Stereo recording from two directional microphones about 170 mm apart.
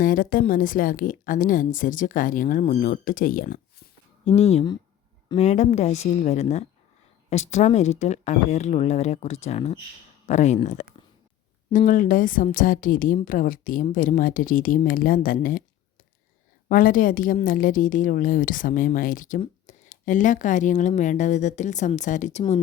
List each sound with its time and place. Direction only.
0.0 s a woman's voice: 55° left (ahead or behind)
4.3 s a woman's voice: 40° left (ahead or behind)